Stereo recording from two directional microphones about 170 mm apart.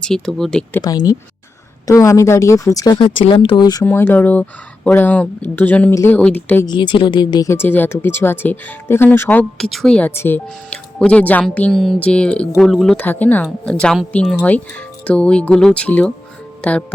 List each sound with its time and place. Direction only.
0.0 s a woman's voice: 5° left (ahead or behind)
0.8 s speech: 25° left (ahead or behind)
3.8 s speech: 10° left (ahead or behind)
6.7 s a woman's voice: 25° left (ahead or behind); by 16.8 s 5° left (ahead or behind)